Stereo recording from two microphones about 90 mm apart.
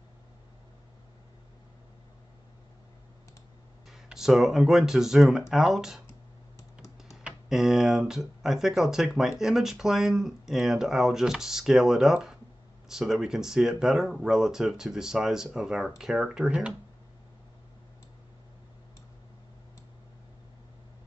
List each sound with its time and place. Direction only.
3.9 s speech: 5° right (ahead or behind)
7.2 s computer keyboard: 5° right (ahead or behind)
8.1 s speech: 5° right (ahead or behind)